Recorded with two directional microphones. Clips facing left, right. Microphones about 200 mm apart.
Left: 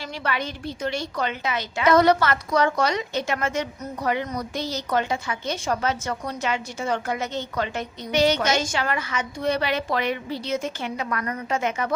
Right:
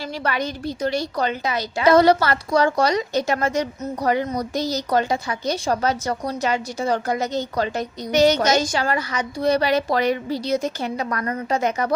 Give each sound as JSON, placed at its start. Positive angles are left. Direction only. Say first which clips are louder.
{"t": 0.2, "sound": "a woman's voice", "louder": "right 3 dB", "side_deg": -40}